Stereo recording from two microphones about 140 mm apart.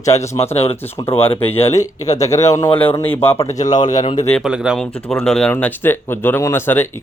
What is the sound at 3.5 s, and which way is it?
Speech, 30° left (ahead or behind).